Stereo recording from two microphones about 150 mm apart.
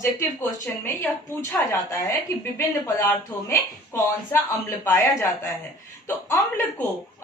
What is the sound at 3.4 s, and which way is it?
A man's voice, 15° left (ahead or behind).